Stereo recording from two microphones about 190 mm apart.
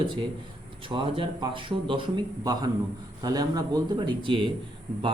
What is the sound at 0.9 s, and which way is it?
A man's voice, 25° right (ahead or behind).